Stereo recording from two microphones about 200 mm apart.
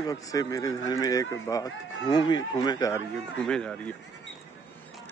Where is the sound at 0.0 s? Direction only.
15° left (ahead or behind).